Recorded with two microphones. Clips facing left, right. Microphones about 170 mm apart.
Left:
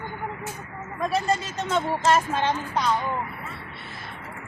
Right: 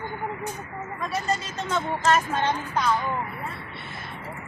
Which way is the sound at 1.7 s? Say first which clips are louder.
Left 1 dB; 25° left (ahead or behind).